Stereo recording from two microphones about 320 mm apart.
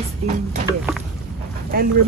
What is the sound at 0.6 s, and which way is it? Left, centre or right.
Boat, centre.